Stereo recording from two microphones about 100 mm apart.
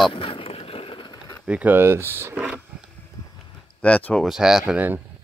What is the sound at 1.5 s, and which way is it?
Speech, 15° right (ahead or behind).